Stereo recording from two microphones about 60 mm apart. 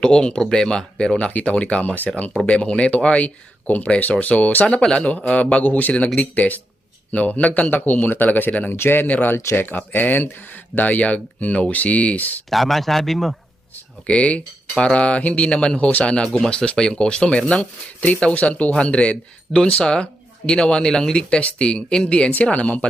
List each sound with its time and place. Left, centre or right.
0.0 s speech: centre
1.3 s speech: left
12.5 s speech: centre
14.1 s speech: left